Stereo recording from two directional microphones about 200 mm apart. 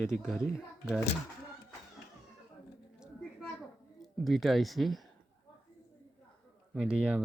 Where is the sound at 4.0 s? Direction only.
Centre (ahead or behind).